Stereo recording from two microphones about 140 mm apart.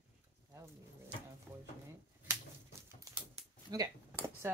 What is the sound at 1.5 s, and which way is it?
Speech, centre (ahead or behind).